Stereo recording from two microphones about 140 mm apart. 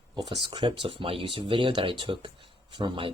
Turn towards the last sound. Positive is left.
turn(degrees=-35)  # may be behind; listen again after turning